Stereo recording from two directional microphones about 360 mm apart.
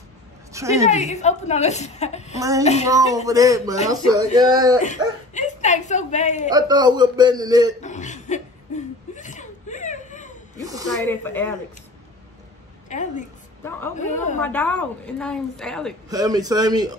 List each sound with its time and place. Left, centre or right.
0.5 s a woman's voice: centre
0.8 s a woman's voice: centre
2.3 s a man's voice: centre
2.6 s a woman's voice: centre
2.9 s a man's voice: centre
4.8 s a woman's voice: centre
6.5 s a man's voice: centre
7.8 s chuckle: centre
10.6 s snake: centre
11.1 s a woman's voice: centre
12.9 s a woman's voice: left
13.7 s a woman's voice: centre
16.1 s a man's voice: centre